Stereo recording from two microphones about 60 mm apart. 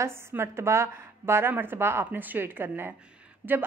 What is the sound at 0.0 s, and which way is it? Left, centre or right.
A woman's voice, right.